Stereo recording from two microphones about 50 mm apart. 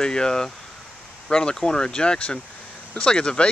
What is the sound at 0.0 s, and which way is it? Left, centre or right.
Speech, centre.